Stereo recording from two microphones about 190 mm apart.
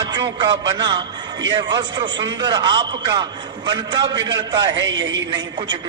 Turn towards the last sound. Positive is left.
turn(degrees=-25)  # may be behind; listen again after turning